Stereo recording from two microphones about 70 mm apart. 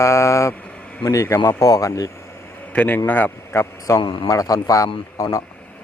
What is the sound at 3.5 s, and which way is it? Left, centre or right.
A man's voice, left.